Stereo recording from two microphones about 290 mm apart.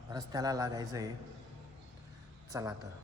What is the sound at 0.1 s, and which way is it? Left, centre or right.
Speech, centre.